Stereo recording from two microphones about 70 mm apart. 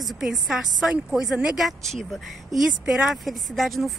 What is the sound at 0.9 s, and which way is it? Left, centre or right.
Speech, centre.